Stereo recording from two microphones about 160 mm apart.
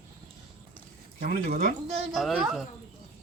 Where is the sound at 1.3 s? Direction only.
55° right (ahead or behind).